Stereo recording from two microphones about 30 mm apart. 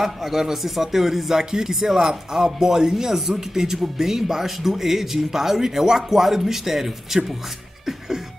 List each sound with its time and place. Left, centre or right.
0.0 s speech: centre